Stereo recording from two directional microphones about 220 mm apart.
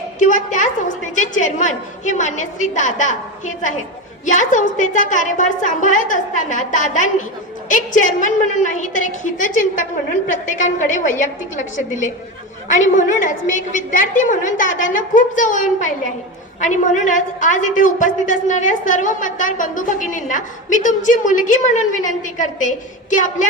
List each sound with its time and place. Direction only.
0.2 s a woman's voice: 35° left (ahead or behind)